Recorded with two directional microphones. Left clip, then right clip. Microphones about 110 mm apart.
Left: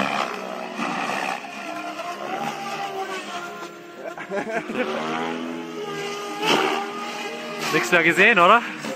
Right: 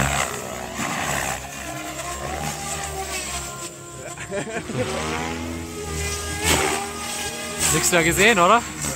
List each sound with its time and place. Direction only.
0.0 s vehicle: 10° right (ahead or behind)
0.7 s vehicle: 20° right (ahead or behind)
4.4 s speech: 15° left (ahead or behind)
4.9 s vehicle: 35° right (ahead or behind)
6.4 s vehicle: 35° right (ahead or behind)
7.7 s speech: 25° right (ahead or behind)